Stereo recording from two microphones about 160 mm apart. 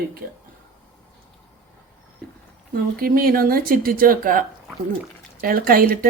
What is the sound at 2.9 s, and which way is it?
Speech, 65° right (ahead or behind).